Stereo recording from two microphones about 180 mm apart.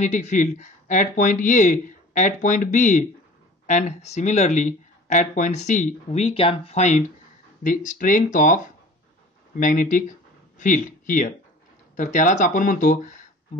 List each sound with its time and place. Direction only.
0.0 s speech: 40° left (ahead or behind)